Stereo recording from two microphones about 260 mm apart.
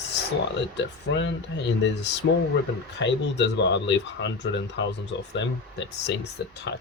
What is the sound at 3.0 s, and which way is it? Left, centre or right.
Speech, left.